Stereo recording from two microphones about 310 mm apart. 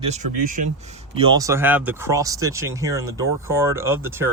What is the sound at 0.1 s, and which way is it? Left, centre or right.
Speech, right.